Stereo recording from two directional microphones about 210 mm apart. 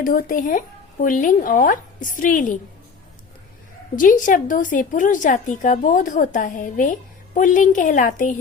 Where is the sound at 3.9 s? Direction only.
40° left (ahead or behind).